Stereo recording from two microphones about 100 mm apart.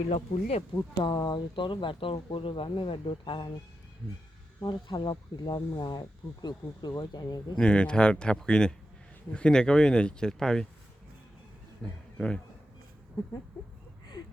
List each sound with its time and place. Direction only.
0.1 s speech: 90° left
1.0 s speech: 45° left (ahead or behind)
4.6 s speech: 55° left (ahead or behind)
7.5 s speech: 10° left (ahead or behind)
11.8 s a man's voice: 5° left (ahead or behind)